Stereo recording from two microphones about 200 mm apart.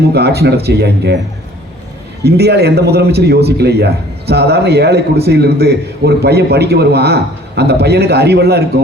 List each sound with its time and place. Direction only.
0.1 s speech: 55° right (ahead or behind)
2.2 s speech: 55° right (ahead or behind)